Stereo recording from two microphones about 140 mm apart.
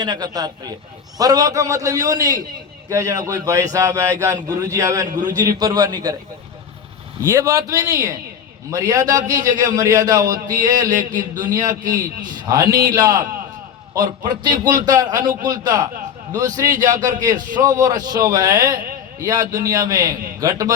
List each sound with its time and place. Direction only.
0.0 s a man's voice: 30° right (ahead or behind)
7.2 s a man's voice: 20° right (ahead or behind)
11.7 s a man's voice: 70° right (ahead or behind)
12.5 s a man's voice: 25° right (ahead or behind)